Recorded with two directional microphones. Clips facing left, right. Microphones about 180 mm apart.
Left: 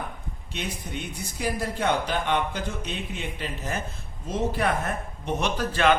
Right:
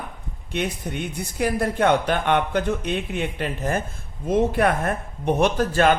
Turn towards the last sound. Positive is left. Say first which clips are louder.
# right 4 dB
turn(degrees=-45)  # may be behind; listen again after turning